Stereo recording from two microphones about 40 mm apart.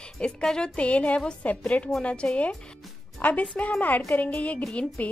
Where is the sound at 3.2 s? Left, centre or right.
Left.